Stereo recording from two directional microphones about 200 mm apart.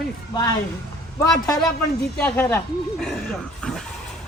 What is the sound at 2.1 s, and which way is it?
Speech, 5° left (ahead or behind).